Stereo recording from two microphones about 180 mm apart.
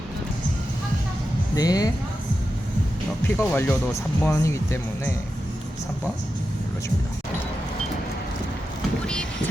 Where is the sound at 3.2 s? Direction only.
10° left (ahead or behind).